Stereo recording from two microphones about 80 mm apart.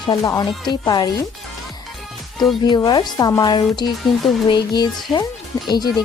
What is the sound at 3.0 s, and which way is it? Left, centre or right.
Speech, left.